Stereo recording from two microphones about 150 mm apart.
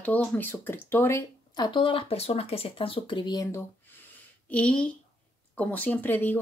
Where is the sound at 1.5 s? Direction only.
30° left (ahead or behind).